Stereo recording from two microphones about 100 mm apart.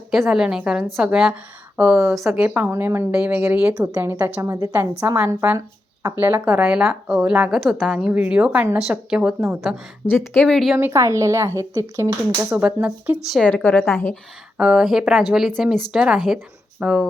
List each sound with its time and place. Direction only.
0.1 s a woman's voice: 5° right (ahead or behind)
4.2 s a woman's voice: 35° right (ahead or behind)
4.7 s a woman's voice: 20° right (ahead or behind)
5.5 s a sound: 35° right (ahead or behind)
6.1 s speech: 20° right (ahead or behind)
6.5 s a woman's voice: 10° right (ahead or behind)
7.9 s a woman's voice: 15° right (ahead or behind)
10.1 s a woman's voice: 20° left (ahead or behind)
10.4 s speech: 5° left (ahead or behind)
10.8 s speech: 25° right (ahead or behind)
12.5 s a woman's voice: 15° right (ahead or behind)
13.4 s a woman's voice: 15° left (ahead or behind)
14.6 s a woman's voice: 10° right (ahead or behind)